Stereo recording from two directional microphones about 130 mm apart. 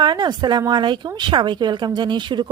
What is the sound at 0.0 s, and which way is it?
Speech, 35° right (ahead or behind).